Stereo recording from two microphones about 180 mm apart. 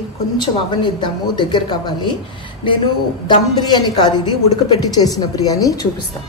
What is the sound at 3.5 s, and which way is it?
A woman's voice, 25° left (ahead or behind).